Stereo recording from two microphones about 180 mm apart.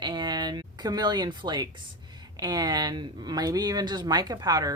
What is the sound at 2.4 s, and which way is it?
Speech, 20° right (ahead or behind).